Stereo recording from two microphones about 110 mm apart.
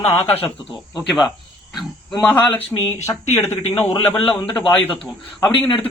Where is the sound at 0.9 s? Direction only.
Centre (ahead or behind).